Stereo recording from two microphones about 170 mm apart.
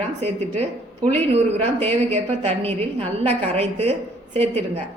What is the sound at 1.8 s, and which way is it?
A woman's voice, 35° right (ahead or behind).